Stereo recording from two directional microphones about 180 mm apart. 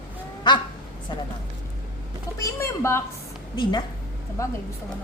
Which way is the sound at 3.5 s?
25° left (ahead or behind).